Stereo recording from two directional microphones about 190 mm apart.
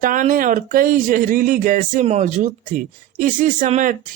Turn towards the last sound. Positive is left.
turn(degrees=-40)  # may be behind; listen again after turning